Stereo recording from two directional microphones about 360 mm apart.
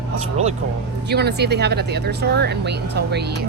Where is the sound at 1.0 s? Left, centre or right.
Right.